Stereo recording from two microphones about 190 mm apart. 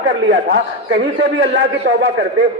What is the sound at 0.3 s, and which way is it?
A man's voice, 60° right (ahead or behind).